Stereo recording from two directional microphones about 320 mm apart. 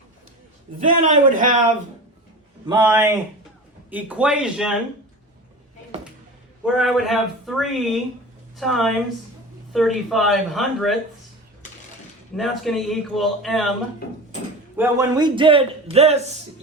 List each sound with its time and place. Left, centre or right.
0.8 s a man's voice: right
2.6 s a man's voice: centre
6.7 s a man's voice: centre
12.4 s a man's voice: centre
14.8 s a man's voice: centre